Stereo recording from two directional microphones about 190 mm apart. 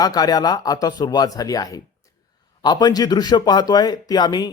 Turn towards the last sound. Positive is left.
turn(degrees=20)  # may be behind; listen again after turning